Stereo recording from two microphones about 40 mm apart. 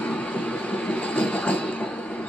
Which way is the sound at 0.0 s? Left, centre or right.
Left.